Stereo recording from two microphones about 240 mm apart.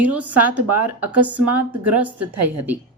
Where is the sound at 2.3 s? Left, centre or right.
Right.